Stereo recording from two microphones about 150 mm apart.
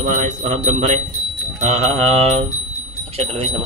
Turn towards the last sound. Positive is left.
turn(degrees=-40)  # may be behind; listen again after turning